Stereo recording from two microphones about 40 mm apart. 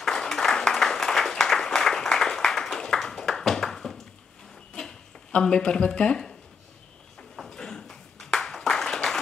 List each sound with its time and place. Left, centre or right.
0.0 s applause: centre
5.4 s speech: centre
7.5 s a sound: centre